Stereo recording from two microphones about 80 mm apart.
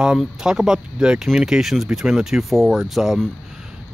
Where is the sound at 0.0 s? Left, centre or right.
Centre.